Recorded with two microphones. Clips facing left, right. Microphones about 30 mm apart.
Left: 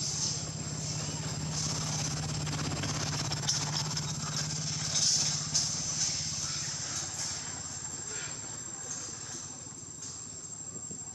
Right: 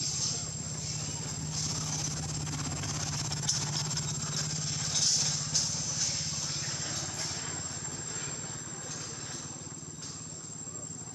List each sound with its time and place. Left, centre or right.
0.0 s vehicle: centre
0.9 s vehicle: centre
1.2 s vehicle: left
1.5 s vehicle: centre
1.8 s vehicle: centre
2.9 s vehicle: centre
6.7 s vehicle: centre